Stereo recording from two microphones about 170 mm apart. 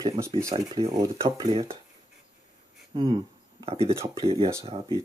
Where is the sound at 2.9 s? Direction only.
30° right (ahead or behind).